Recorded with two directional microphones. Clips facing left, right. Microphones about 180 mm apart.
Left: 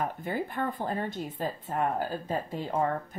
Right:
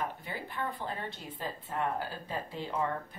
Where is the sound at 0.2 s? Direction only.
50° left (ahead or behind).